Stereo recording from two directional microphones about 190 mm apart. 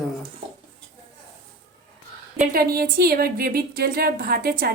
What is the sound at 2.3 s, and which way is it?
A woman's voice, 50° right (ahead or behind).